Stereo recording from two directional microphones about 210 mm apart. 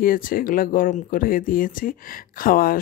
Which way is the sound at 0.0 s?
40° left (ahead or behind).